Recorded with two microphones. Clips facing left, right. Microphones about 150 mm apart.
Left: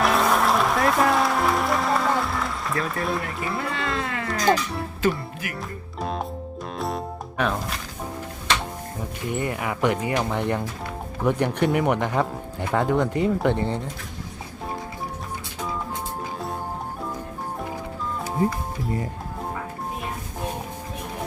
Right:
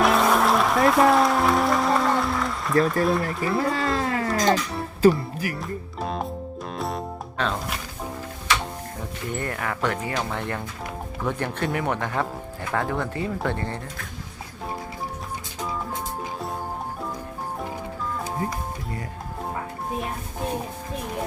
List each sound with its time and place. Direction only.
0.0 s music: centre (ahead or behind)
2.8 s speech: centre (ahead or behind)
3.6 s speech: 40° right (ahead or behind)
6.0 s music: centre (ahead or behind)
7.3 s speech: 10° left (ahead or behind)
9.3 s speech: 10° left (ahead or behind)